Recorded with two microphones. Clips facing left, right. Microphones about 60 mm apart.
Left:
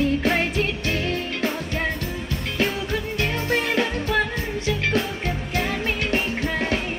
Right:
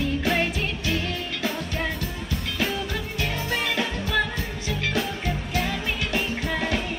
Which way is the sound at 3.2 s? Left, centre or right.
Left.